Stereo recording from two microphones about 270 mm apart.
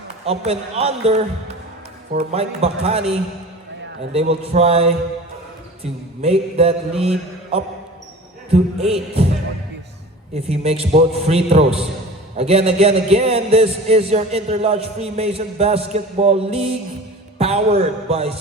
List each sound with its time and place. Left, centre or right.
0.3 s a man's voice: right
10.4 s a man's voice: right